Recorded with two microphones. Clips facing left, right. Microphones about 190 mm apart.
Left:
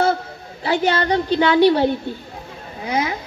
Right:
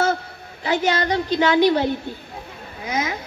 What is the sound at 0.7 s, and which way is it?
Speech, 35° left (ahead or behind).